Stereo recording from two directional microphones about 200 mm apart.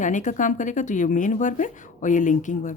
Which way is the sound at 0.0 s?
40° left (ahead or behind).